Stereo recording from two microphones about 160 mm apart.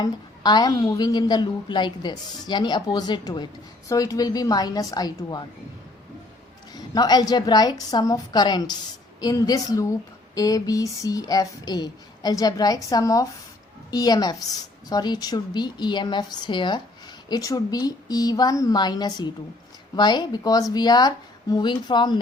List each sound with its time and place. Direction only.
0.0 s a woman's voice: 25° left (ahead or behind)
6.7 s a woman's voice: 25° left (ahead or behind)